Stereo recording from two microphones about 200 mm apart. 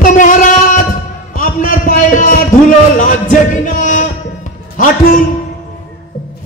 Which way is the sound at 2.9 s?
40° left (ahead or behind).